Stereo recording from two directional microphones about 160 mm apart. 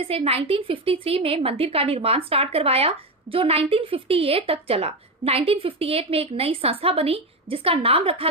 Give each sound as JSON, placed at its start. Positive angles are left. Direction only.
{"t": 0.0, "sound": "a woman's voice", "side_deg": -40}